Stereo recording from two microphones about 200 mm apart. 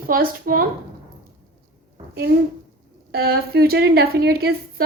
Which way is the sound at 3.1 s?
50° right (ahead or behind).